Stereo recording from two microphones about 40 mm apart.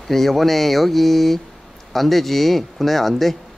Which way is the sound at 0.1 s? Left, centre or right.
Centre.